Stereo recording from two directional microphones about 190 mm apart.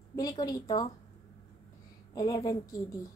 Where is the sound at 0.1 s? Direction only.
20° left (ahead or behind).